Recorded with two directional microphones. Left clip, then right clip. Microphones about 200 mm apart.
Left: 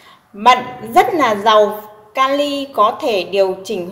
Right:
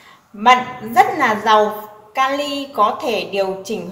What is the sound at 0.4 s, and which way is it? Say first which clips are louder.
A woman's voice: left 1 dB; 40° left (ahead or behind).